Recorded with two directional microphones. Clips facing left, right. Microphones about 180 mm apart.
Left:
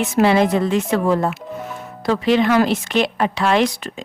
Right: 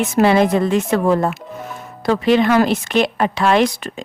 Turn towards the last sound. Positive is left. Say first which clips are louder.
# right 2 dB
turn(degrees=-50)  # may be behind; listen again after turning